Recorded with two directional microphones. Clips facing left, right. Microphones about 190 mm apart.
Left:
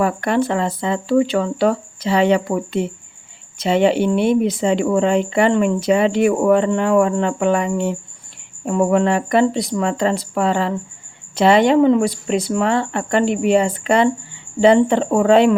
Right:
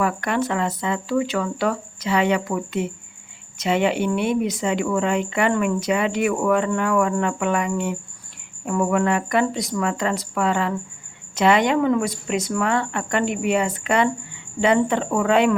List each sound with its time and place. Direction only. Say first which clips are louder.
0.0 s speech: left 5 dB; 30° left (ahead or behind)